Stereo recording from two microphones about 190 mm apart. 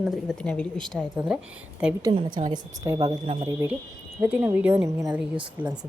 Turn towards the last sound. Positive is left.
turn(degrees=-5)  # may be behind; listen again after turning